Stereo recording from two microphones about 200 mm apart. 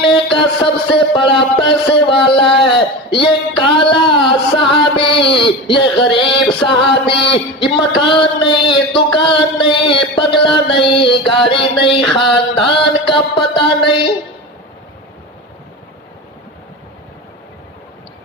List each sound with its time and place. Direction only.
0.6 s music: 25° left (ahead or behind)
7.6 s a sound: 25° left (ahead or behind)
12.1 s mantra: 25° left (ahead or behind)